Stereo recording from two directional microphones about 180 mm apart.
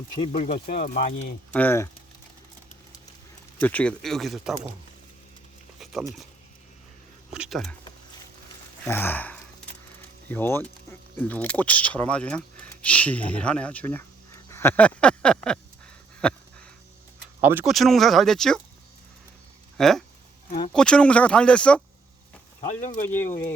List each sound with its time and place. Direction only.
0.3 s speech: 50° left (ahead or behind)
1.5 s speech: 10° left (ahead or behind)
3.6 s speech: 10° left (ahead or behind)
5.8 s speech: centre (ahead or behind)
7.3 s speech: centre (ahead or behind)
8.8 s speech: 10° left (ahead or behind)
17.4 s speech: 10° right (ahead or behind)
19.7 s speech: centre (ahead or behind)
23.0 s speech: 10° left (ahead or behind)